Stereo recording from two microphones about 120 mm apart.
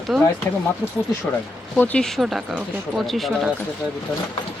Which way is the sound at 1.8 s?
10° left (ahead or behind).